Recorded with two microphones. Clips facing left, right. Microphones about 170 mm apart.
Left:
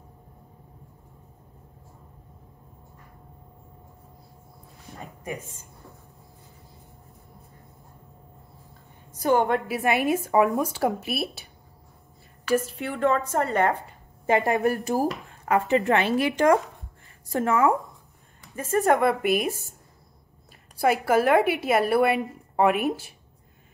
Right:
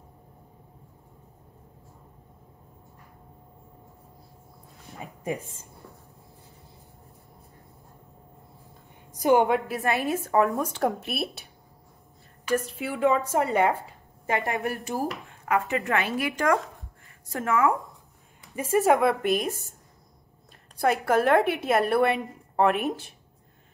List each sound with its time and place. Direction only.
5.2 s speech: 30° right (ahead or behind)
9.1 s a woman's voice: 15° right (ahead or behind)
9.5 s speech: 5° left (ahead or behind)
12.4 s a woman's voice: centre (ahead or behind)
14.4 s a woman's voice: 40° left (ahead or behind)
18.5 s a woman's voice: 10° right (ahead or behind); by 19.5 s 5° left (ahead or behind)
20.8 s a woman's voice: 5° left (ahead or behind)